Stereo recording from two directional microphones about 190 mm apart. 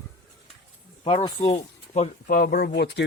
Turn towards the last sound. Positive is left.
turn(degrees=65)  # may be behind; listen again after turning